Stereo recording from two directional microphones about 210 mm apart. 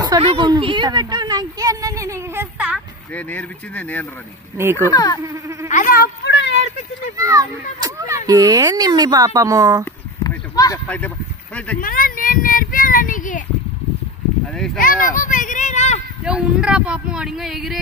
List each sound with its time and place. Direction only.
0.0 s a woman's voice: 25° right (ahead or behind); by 2.8 s 10° right (ahead or behind)
3.2 s speech: 5° left (ahead or behind)
4.6 s speech: 10° right (ahead or behind)
4.8 s speech: 15° left (ahead or behind)
5.2 s mosquito: 15° right (ahead or behind)
5.7 s a sound: 40° left (ahead or behind); by 6.7 s 55° left (ahead or behind)
7.2 s children playing: 15° right (ahead or behind)
8.3 s speech: 15° right (ahead or behind)
10.2 s a sound: 15° left (ahead or behind)
11.5 s speech: 5° left (ahead or behind)
11.8 s a child's voice: 40° left (ahead or behind)
14.8 s a sound: 40° left (ahead or behind)
16.3 s speech: 5° right (ahead or behind)